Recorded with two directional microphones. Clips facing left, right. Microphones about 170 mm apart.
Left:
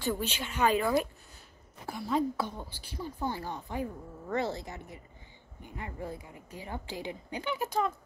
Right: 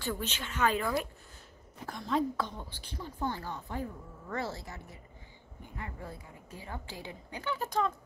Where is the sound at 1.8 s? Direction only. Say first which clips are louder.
Left 1 dB; 10° left (ahead or behind).